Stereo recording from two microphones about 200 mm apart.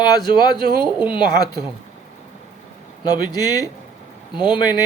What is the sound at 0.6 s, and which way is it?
Speech, 50° right (ahead or behind).